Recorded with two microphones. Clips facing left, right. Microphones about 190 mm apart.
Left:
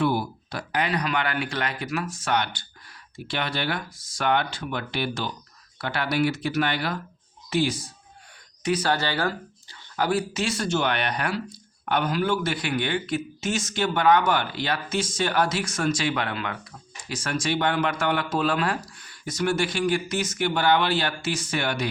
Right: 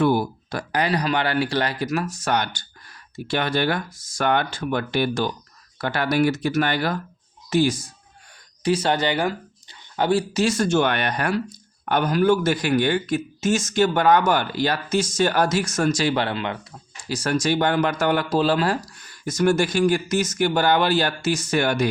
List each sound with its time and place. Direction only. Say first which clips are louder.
0.0 s speech: right 5 dB; 50° right (ahead or behind)
8.6 s speech: right 4 dB; 25° right (ahead or behind)
10.4 s speech: right 6 dB; 45° right (ahead or behind); by 16.6 s 25° right (ahead or behind)
17.1 s speech: right 5 dB; 35° right (ahead or behind)